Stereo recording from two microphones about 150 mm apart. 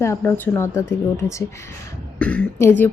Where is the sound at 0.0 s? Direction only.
15° left (ahead or behind).